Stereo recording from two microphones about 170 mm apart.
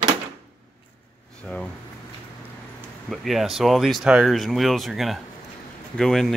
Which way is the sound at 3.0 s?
Centre (ahead or behind).